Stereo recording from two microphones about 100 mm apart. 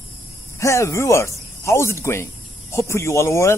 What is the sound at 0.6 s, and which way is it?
Speech, 30° left (ahead or behind).